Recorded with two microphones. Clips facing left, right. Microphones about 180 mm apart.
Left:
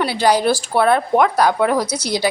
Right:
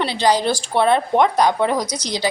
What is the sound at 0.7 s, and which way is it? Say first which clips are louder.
Speech: even; 25° right (ahead or behind).